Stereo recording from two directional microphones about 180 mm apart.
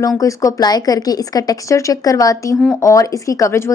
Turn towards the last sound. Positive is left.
turn(degrees=20)  # may be behind; listen again after turning